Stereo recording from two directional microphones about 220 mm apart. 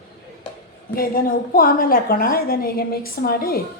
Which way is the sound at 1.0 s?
40° left (ahead or behind).